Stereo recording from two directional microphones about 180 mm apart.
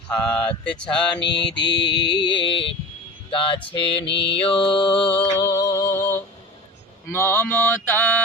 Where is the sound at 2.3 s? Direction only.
25° left (ahead or behind).